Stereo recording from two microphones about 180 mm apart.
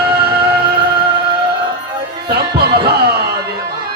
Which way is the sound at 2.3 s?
65° right (ahead or behind).